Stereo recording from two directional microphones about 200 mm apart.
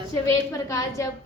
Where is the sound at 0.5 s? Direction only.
15° left (ahead or behind).